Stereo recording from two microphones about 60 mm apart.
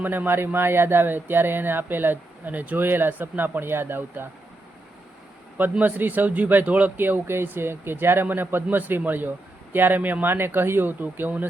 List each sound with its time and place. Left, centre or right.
0.0 s speech: right
5.8 s speech: right